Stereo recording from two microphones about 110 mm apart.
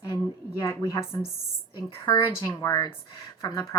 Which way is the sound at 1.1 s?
35° left (ahead or behind).